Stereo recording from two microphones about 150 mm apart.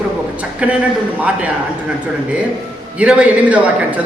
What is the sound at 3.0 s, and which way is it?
A man's voice, 10° right (ahead or behind).